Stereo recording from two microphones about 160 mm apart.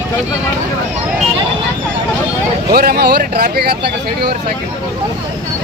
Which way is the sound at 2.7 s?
70° right (ahead or behind).